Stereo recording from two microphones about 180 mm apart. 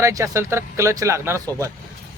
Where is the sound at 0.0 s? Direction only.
15° right (ahead or behind).